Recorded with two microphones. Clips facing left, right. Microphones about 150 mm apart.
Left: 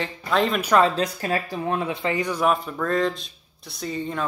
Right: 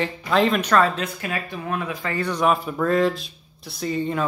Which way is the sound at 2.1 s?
10° left (ahead or behind).